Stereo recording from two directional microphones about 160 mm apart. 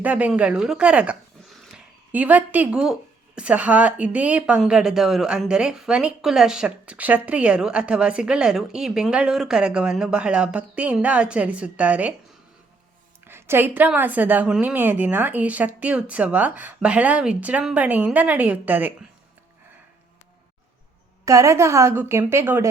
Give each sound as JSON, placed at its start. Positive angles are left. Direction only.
{"t": 0.0, "sound": "speech", "side_deg": -10}
{"t": 13.2, "sound": "speech", "side_deg": -15}
{"t": 21.2, "sound": "speech", "side_deg": -20}